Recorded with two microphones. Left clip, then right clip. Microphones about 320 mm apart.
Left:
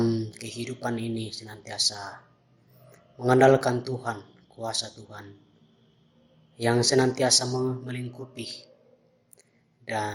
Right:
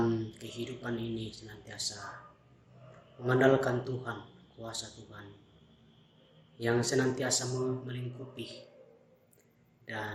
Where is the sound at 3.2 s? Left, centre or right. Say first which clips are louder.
Left 7 dB; left.